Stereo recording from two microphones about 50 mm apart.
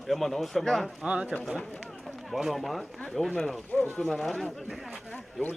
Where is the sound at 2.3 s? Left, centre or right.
Centre.